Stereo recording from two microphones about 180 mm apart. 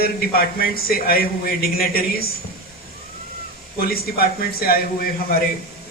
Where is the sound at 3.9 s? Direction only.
55° left (ahead or behind).